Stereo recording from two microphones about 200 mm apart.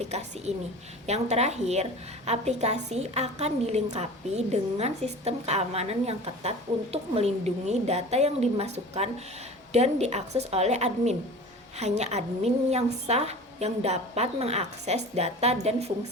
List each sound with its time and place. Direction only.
0.0 s a woman's voice: 35° right (ahead or behind)